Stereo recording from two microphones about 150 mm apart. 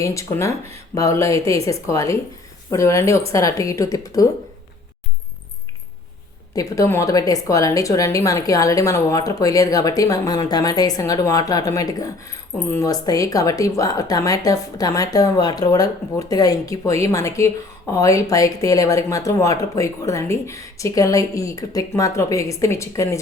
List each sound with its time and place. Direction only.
0.0 s speech: 20° left (ahead or behind)
6.5 s speech: 20° left (ahead or behind)